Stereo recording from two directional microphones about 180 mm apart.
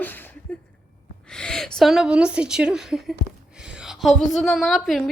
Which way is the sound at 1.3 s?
5° left (ahead or behind).